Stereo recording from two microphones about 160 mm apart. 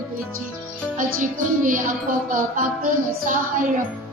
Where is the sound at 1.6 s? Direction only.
55° right (ahead or behind).